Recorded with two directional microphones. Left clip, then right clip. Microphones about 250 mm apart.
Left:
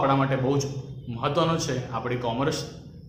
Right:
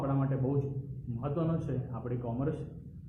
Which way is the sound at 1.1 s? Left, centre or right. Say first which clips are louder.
Left 11 dB; centre.